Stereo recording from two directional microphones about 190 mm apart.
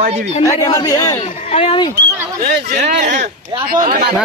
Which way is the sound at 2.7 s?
40° right (ahead or behind).